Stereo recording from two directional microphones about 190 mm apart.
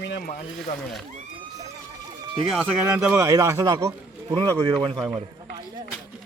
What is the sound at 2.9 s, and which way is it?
A man's voice, 10° right (ahead or behind).